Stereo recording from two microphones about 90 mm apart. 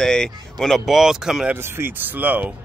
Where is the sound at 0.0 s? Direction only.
5° left (ahead or behind).